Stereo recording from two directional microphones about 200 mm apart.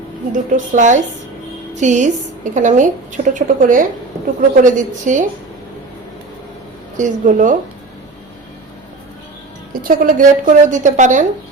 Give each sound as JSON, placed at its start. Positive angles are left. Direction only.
{"t": 0.5, "sound": "a woman's voice", "side_deg": -40}
{"t": 6.9, "sound": "a woman's voice", "side_deg": -40}
{"t": 9.8, "sound": "a woman's voice", "side_deg": -45}